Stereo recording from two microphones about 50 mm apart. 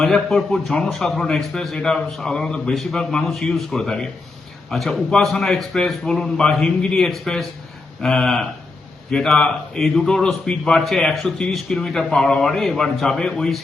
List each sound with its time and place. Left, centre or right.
0.0 s speech: centre
7.1 s speech: centre